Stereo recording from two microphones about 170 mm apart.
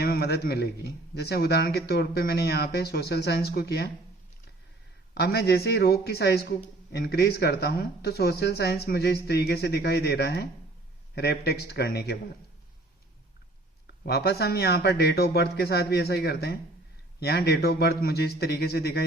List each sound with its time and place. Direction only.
0.0 s a man's voice: 70° left (ahead or behind)
5.1 s a man's voice: 70° left (ahead or behind)
14.0 s a man's voice: 70° left (ahead or behind)